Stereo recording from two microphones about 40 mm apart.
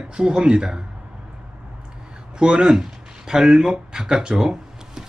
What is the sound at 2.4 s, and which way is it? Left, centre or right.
Speech, centre.